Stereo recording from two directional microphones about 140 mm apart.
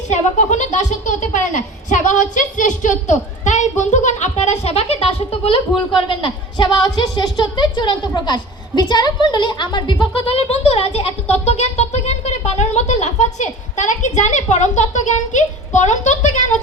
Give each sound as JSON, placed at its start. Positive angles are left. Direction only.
{"t": 0.1, "sound": "a child's voice", "side_deg": 60}